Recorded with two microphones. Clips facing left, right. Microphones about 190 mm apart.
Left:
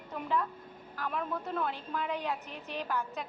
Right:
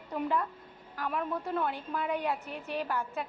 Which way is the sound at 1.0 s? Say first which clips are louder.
Right 2 dB; 10° right (ahead or behind).